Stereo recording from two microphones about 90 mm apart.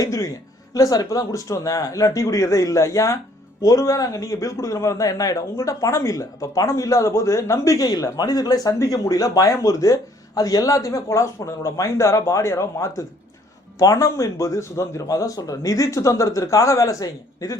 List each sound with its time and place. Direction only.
0.0 s a man's voice: 35° left (ahead or behind)